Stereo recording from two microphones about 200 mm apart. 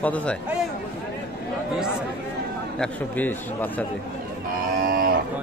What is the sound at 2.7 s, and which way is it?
Speech, 5° left (ahead or behind).